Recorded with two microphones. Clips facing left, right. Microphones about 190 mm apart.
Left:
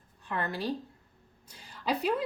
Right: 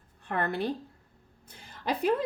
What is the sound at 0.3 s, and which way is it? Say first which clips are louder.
Speech: right 3 dB; 55° right (ahead or behind).